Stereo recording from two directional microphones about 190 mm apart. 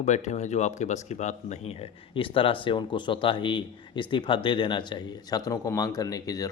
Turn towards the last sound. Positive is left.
turn(degrees=20)  # may be behind; listen again after turning